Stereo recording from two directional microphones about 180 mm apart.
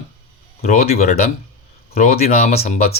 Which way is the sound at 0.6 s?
40° left (ahead or behind).